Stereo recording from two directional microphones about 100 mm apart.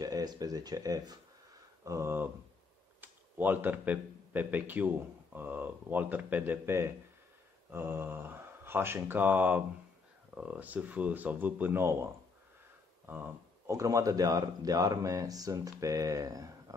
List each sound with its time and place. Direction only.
0.0 s speech: 40° right (ahead or behind)
1.9 s speech: 25° right (ahead or behind)
13.7 s speech: 30° right (ahead or behind)